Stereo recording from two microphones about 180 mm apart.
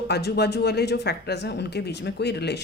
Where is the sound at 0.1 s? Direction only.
65° left (ahead or behind).